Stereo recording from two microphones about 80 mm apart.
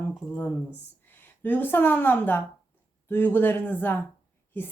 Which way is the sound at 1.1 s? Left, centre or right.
Left.